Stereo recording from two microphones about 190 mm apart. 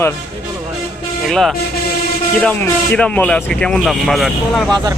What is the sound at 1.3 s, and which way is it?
Speech, centre (ahead or behind).